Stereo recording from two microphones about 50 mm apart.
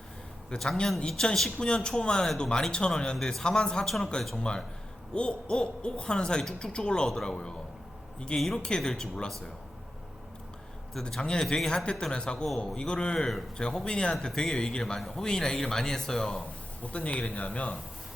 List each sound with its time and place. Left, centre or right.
0.5 s speech: centre
3.8 s speech: centre
5.1 s speech: centre
8.6 s speech: centre
11.2 s speech: centre
16.8 s speech: left